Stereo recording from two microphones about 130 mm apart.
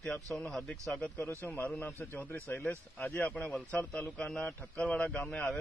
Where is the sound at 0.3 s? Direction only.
5° left (ahead or behind).